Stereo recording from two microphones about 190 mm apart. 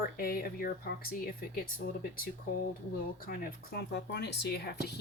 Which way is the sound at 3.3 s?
50° left (ahead or behind).